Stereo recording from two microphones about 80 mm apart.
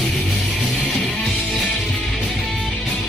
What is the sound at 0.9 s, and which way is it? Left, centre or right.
Music, centre.